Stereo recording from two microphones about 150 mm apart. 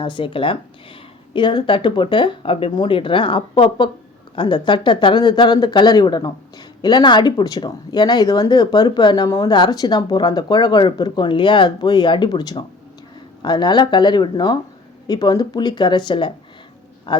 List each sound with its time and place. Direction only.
0.0 s a man's voice: 35° left (ahead or behind)